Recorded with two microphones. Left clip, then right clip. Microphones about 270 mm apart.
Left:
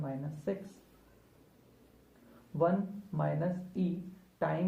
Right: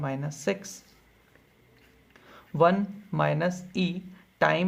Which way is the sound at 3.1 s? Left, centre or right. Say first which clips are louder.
Right 9 dB; right.